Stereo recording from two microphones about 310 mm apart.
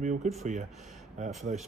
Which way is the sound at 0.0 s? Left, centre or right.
Right.